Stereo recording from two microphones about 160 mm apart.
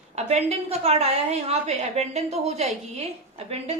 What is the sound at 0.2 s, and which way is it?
A woman's voice, 40° right (ahead or behind).